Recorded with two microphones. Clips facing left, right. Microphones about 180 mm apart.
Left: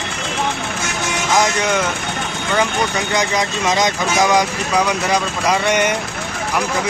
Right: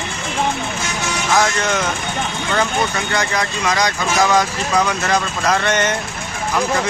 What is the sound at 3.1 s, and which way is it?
Speech, 20° left (ahead or behind).